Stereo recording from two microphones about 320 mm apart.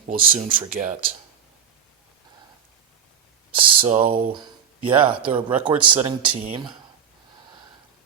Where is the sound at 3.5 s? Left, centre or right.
Centre.